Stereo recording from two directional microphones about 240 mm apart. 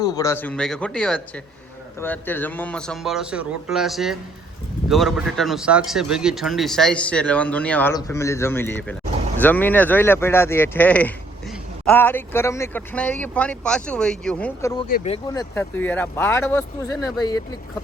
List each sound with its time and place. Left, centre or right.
0.0 s speech: centre
17.2 s speech: centre